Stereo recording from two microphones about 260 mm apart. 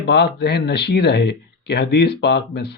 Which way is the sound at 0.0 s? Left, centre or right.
Left.